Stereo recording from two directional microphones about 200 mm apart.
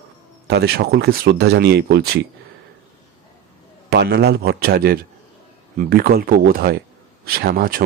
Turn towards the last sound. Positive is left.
turn(degrees=-45)  # may be behind; listen again after turning